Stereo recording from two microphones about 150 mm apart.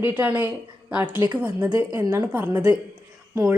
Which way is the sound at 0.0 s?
10° right (ahead or behind).